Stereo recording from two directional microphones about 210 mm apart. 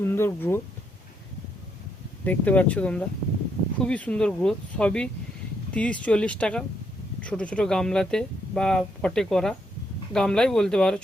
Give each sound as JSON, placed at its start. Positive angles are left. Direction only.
{"t": 0.0, "sound": "speech", "side_deg": 10}
{"t": 2.2, "sound": "speech", "side_deg": 10}